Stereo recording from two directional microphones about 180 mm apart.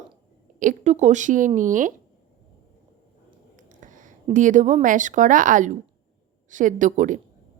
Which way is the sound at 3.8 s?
45° right (ahead or behind).